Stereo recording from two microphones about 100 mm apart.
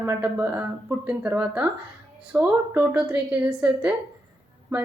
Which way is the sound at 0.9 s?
20° right (ahead or behind).